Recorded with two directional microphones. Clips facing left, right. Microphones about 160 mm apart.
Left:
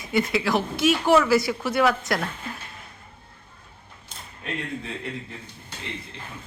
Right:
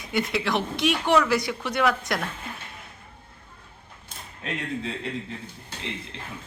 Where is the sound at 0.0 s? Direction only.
Centre (ahead or behind).